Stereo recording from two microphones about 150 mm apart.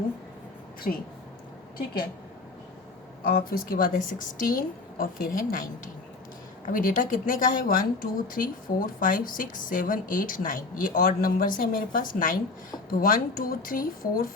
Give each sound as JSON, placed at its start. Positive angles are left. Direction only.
{"t": 0.9, "sound": "speech", "side_deg": 65}
{"t": 3.2, "sound": "a woman's voice", "side_deg": 70}
{"t": 6.7, "sound": "a woman's voice", "side_deg": 65}